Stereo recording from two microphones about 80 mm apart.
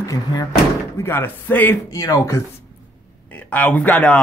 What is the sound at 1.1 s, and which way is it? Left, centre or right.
Speech, left.